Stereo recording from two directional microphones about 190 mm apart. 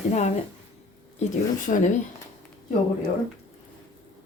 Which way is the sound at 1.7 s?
45° left (ahead or behind).